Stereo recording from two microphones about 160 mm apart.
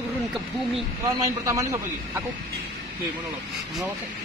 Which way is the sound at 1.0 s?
20° right (ahead or behind).